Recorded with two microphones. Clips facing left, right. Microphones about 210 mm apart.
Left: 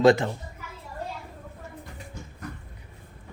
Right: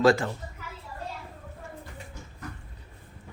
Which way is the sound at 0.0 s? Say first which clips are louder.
Left 3 dB; 20° left (ahead or behind).